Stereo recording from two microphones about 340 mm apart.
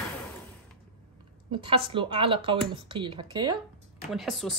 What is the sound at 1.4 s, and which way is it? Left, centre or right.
Speech, centre.